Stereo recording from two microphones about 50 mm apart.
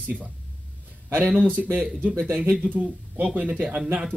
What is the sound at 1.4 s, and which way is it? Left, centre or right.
Speech, right.